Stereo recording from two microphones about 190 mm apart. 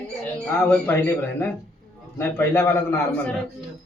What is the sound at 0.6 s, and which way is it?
Speech, 10° left (ahead or behind).